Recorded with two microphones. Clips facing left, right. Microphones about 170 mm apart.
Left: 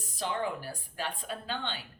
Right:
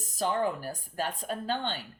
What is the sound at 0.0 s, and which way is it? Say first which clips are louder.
Speech: right 5 dB; 45° right (ahead or behind).